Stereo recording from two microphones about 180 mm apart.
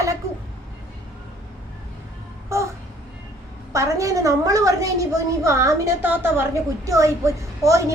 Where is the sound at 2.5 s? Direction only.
15° right (ahead or behind).